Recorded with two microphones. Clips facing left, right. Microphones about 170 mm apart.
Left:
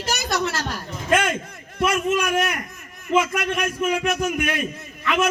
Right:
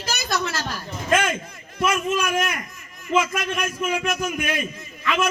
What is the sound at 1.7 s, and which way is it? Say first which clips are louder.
A man's voice: left 2 dB; 60° left (ahead or behind).